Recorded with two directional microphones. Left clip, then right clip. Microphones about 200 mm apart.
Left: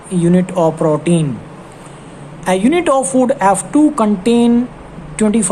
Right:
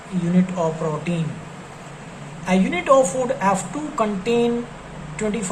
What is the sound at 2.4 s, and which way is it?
A woman's voice, 60° left (ahead or behind).